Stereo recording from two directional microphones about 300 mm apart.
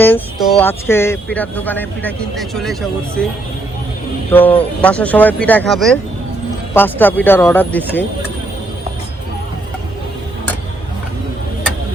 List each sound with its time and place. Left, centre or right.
0.0 s speech: centre
4.3 s speech: centre